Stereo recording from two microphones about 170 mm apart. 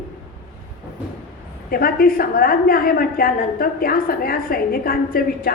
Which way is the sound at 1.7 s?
60° left (ahead or behind).